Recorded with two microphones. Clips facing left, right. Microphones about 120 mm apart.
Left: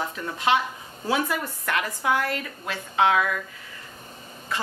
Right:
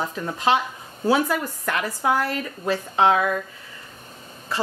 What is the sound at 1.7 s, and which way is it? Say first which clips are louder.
A woman's voice: right 2 dB; 35° right (ahead or behind).